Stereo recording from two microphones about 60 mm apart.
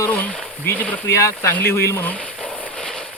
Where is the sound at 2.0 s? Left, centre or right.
Left.